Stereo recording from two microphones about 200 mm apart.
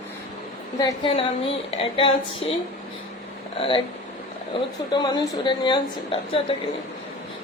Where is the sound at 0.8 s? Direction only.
25° left (ahead or behind).